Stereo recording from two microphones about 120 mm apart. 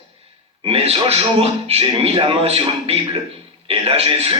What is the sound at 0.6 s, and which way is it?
A man's voice, 55° right (ahead or behind).